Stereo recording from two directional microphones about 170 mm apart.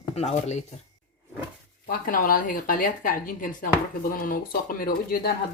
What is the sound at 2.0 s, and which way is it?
Speech, 55° left (ahead or behind).